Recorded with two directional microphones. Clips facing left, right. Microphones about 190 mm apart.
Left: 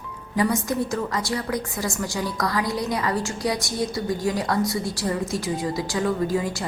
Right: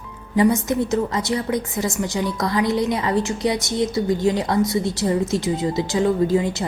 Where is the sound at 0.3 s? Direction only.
25° right (ahead or behind).